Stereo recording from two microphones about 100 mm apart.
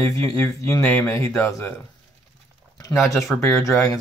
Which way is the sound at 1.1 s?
30° left (ahead or behind).